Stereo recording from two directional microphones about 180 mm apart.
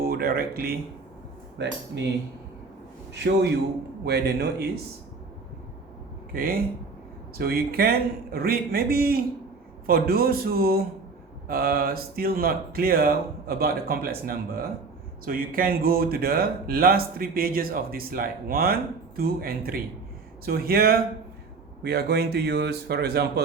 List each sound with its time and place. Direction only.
0.0 s speech: 55° right (ahead or behind)
1.5 s speech: 75° right (ahead or behind)
4.0 s speech: 65° right (ahead or behind)
6.3 s speech: 55° right (ahead or behind)